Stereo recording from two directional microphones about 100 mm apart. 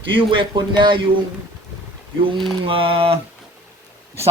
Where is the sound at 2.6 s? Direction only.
60° right (ahead or behind).